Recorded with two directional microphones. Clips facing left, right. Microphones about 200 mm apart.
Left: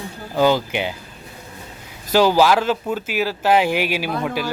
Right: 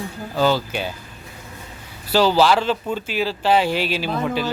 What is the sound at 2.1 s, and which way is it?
A man's voice, 15° left (ahead or behind).